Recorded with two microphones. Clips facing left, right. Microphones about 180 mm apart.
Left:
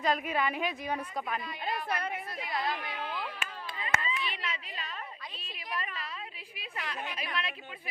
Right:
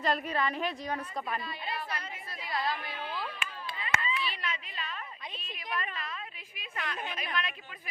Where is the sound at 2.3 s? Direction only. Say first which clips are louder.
Right 3 dB; 20° left (ahead or behind).